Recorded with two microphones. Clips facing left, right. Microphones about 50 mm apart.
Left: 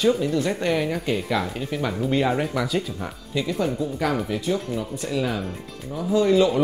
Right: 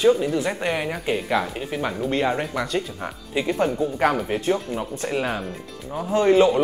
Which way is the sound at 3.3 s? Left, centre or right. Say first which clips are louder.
Right 2 dB; right.